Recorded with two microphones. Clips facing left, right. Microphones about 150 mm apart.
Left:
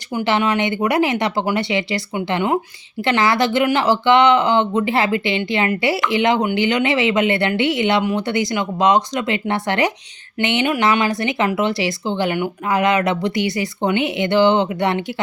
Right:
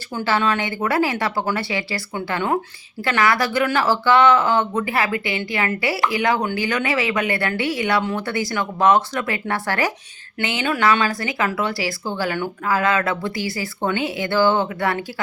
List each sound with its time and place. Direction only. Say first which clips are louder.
0.1 s speech: left 2 dB; 15° left (ahead or behind)